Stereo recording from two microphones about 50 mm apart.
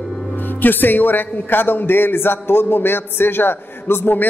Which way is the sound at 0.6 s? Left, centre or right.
Left.